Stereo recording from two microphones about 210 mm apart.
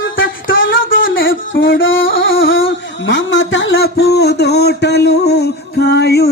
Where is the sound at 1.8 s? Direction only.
65° left (ahead or behind).